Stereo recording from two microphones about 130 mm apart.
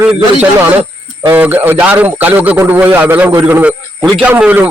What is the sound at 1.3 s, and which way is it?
A man's voice, 15° right (ahead or behind).